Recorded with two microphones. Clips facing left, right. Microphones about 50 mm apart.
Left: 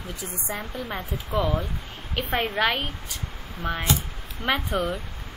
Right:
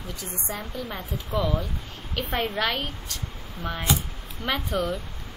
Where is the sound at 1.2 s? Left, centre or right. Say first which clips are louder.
Left 1 dB; centre.